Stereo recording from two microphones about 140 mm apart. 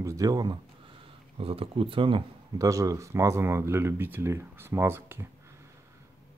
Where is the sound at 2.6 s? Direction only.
25° right (ahead or behind).